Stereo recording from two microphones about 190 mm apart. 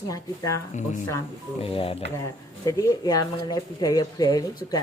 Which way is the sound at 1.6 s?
30° left (ahead or behind).